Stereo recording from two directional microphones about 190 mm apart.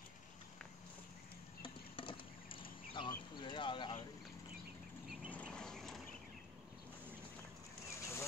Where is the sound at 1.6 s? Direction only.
25° left (ahead or behind).